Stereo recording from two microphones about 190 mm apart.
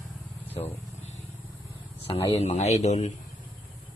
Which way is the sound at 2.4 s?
35° left (ahead or behind).